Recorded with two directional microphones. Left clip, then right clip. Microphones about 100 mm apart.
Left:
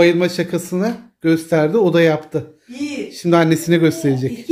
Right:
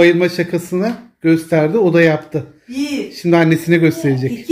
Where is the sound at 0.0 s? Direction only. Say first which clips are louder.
Right 2 dB; 20° left (ahead or behind).